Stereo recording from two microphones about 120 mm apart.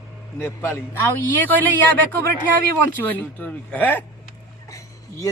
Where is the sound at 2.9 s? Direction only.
15° left (ahead or behind).